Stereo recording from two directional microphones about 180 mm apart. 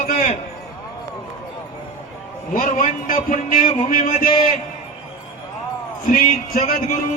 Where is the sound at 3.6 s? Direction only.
35° left (ahead or behind).